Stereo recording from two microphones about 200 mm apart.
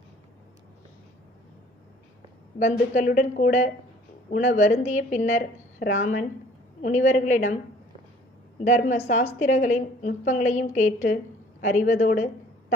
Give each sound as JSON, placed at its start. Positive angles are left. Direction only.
{"t": 2.6, "sound": "a woman's voice", "side_deg": 35}
{"t": 8.6, "sound": "a woman's voice", "side_deg": 40}
{"t": 12.1, "sound": "a sound", "side_deg": 40}